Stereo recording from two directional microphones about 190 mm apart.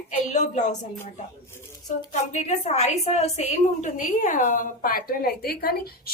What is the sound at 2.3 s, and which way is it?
A woman's voice, 35° left (ahead or behind).